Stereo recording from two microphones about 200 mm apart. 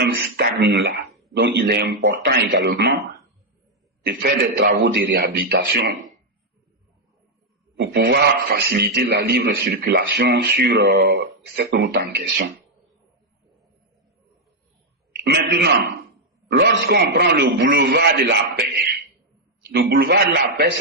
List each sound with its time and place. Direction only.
0.0 s a man's voice: 60° right (ahead or behind)
4.0 s a man's voice: 60° right (ahead or behind)
7.8 s a man's voice: 55° right (ahead or behind)
15.1 s a man's voice: 50° right (ahead or behind)
19.7 s a man's voice: 50° right (ahead or behind)